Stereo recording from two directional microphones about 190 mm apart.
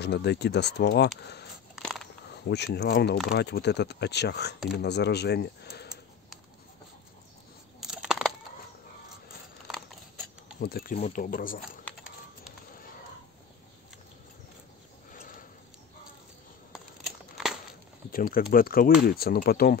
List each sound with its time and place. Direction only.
0.0 s speech: 60° left (ahead or behind)
1.8 s biting: centre (ahead or behind)
2.4 s speech: 60° left (ahead or behind)
7.8 s a sound: 5° right (ahead or behind)
10.6 s speech: 50° left (ahead or behind)
15.1 s a sound: 45° left (ahead or behind)
16.7 s crumpling: centre (ahead or behind)
18.1 s speech: 50° left (ahead or behind)